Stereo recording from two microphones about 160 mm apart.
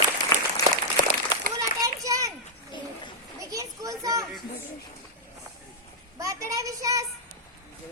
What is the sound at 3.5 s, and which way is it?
Children playing, 20° right (ahead or behind).